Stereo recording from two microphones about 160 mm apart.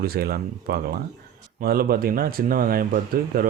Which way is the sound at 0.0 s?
75° right (ahead or behind).